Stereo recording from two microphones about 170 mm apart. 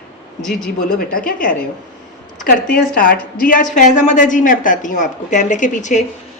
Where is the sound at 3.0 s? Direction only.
55° left (ahead or behind).